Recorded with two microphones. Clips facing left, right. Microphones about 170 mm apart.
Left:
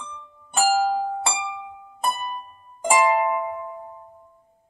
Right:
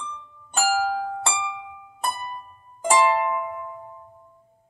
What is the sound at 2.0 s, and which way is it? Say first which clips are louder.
Music: left 3 dB; 15° left (ahead or behind).